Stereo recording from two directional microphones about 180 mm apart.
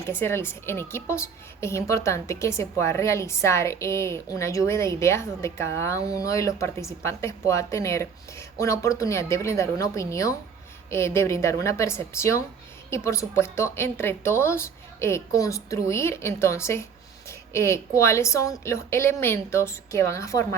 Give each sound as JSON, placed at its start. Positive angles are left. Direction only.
{"t": 0.0, "sound": "a woman's voice", "side_deg": 15}